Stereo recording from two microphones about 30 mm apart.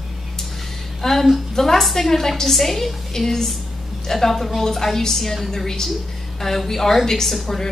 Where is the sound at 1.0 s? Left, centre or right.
Centre.